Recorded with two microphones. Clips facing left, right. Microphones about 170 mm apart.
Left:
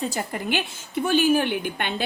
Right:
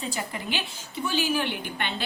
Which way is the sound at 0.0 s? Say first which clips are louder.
Left 5 dB; 40° left (ahead or behind).